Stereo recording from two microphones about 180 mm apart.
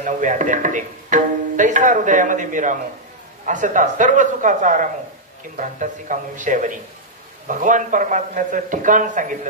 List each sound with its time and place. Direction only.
0.0 s speech: 45° right (ahead or behind)